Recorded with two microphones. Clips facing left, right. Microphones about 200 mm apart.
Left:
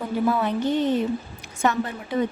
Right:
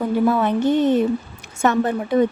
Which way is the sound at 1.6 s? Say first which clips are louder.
Right 5 dB; 45° right (ahead or behind).